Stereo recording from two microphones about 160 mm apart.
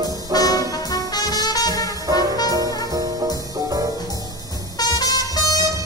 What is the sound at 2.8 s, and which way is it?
Music, 20° right (ahead or behind).